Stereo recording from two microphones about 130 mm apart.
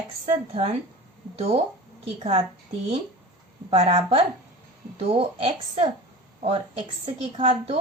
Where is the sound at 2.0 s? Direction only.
50° right (ahead or behind).